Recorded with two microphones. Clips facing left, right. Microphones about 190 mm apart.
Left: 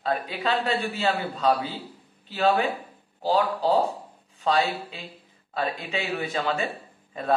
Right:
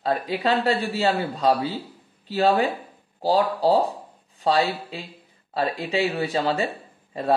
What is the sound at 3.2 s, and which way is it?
Speech, 35° right (ahead or behind).